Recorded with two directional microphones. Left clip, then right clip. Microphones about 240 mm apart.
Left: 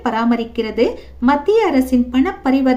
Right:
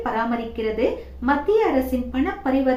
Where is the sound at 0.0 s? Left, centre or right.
Left.